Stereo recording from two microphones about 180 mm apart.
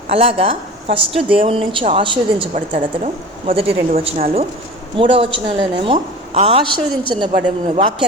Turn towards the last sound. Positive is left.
turn(degrees=-30)  # may be behind; listen again after turning